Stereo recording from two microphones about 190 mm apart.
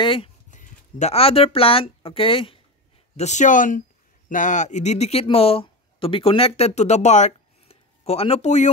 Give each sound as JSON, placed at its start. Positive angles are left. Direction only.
{"t": 0.0, "sound": "speech", "side_deg": 25}
{"t": 0.5, "sound": "speech", "side_deg": 40}
{"t": 3.2, "sound": "speech", "side_deg": 40}